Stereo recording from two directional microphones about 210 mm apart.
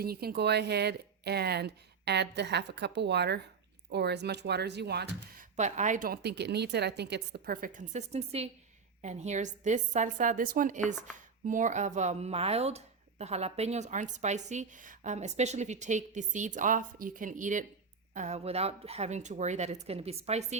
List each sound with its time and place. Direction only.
0.0 s speech: 45° right (ahead or behind); by 20.6 s 30° right (ahead or behind)